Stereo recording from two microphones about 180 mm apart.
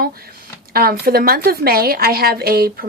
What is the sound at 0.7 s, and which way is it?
A woman's voice, 55° right (ahead or behind).